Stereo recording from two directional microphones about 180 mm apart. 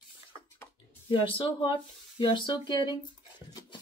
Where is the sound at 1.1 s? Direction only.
30° left (ahead or behind).